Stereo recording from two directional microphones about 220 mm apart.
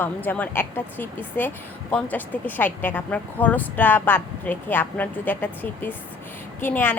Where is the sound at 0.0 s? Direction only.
10° left (ahead or behind).